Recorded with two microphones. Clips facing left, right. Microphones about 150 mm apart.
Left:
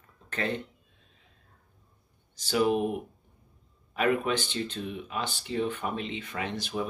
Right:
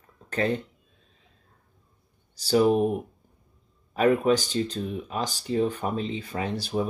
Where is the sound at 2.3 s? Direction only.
35° right (ahead or behind).